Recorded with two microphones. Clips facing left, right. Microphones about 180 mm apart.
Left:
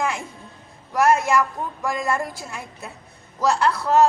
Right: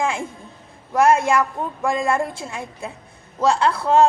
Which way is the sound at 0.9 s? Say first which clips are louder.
Right 2 dB; 25° right (ahead or behind).